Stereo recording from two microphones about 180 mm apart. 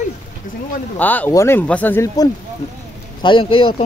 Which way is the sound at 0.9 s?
10° left (ahead or behind).